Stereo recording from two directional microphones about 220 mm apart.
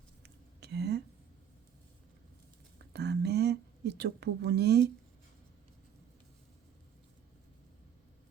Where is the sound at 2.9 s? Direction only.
50° right (ahead or behind).